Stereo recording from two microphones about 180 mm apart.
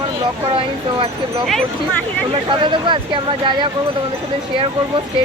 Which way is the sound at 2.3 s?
25° right (ahead or behind).